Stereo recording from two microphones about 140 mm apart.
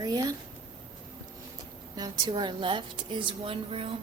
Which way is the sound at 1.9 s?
30° right (ahead or behind).